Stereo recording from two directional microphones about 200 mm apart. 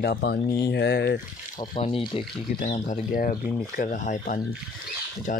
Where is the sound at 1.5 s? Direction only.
25° left (ahead or behind).